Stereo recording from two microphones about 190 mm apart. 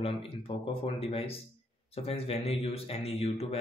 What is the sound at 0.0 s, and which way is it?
Speech, 30° left (ahead or behind).